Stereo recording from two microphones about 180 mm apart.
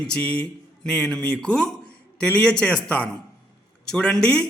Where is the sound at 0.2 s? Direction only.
5° left (ahead or behind).